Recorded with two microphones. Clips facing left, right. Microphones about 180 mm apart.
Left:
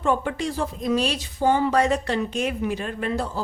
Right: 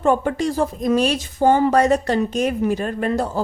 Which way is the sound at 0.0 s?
45° right (ahead or behind).